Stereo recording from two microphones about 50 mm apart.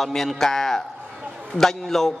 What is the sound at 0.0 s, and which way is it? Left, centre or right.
A man's voice, centre.